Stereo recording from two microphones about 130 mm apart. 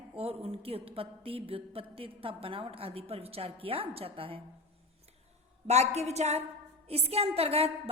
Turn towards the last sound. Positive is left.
turn(degrees=-50)  # may be behind; listen again after turning